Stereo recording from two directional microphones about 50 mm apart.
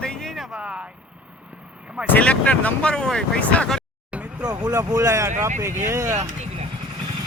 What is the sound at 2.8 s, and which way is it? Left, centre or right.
Speech, centre.